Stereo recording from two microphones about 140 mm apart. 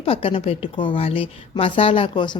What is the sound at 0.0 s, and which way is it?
A woman's voice, 40° left (ahead or behind).